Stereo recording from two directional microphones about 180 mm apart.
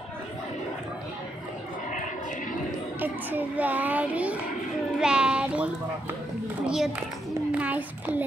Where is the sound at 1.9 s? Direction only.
45° left (ahead or behind).